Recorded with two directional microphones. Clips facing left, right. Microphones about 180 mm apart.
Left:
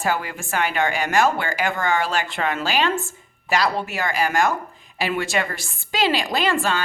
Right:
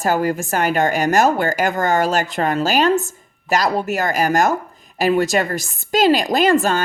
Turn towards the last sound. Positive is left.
turn(degrees=-45)  # may be behind; listen again after turning